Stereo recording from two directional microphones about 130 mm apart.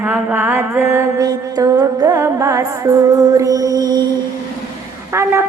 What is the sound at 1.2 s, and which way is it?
Music, 30° right (ahead or behind).